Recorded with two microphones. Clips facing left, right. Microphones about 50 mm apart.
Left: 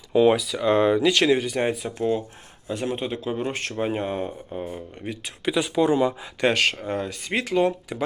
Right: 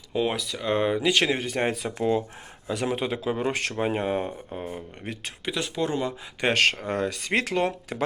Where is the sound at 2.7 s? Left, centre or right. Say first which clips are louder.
Even; right.